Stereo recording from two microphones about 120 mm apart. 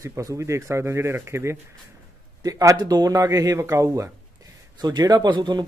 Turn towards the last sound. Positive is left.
turn(degrees=-40)  # may be behind; listen again after turning